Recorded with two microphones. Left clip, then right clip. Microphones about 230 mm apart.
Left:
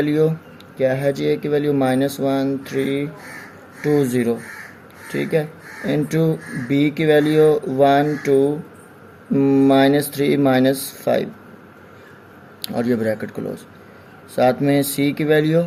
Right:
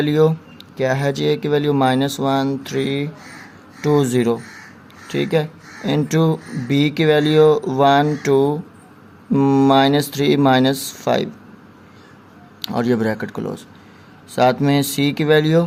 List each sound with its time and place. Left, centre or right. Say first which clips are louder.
0.0 s speech: right 2 dB; right
3.9 s speech: right 2 dB; right
12.6 s speech: right 1 dB; right